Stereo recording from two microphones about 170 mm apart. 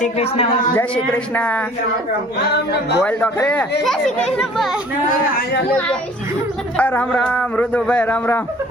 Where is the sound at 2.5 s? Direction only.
75° left (ahead or behind).